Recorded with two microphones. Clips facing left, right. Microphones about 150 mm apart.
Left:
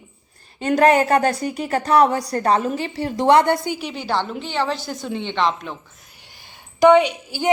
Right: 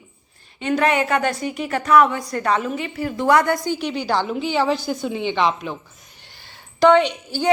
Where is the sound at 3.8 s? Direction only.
Centre (ahead or behind).